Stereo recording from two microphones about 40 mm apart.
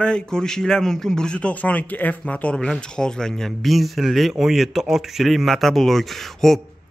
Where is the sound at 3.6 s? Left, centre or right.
Centre.